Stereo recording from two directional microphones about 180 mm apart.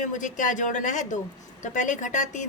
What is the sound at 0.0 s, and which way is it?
A woman's voice, 45° left (ahead or behind).